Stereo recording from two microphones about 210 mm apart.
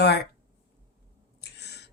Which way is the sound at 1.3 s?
50° left (ahead or behind).